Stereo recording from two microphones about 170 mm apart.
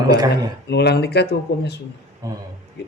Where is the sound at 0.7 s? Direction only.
80° left.